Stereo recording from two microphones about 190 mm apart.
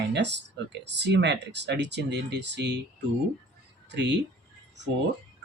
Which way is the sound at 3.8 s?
65° right (ahead or behind).